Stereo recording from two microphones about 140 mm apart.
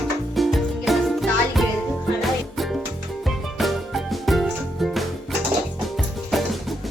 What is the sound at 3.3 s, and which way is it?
Music, centre (ahead or behind).